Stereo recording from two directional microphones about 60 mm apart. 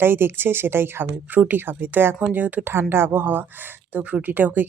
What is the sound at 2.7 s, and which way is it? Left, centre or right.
Speech, right.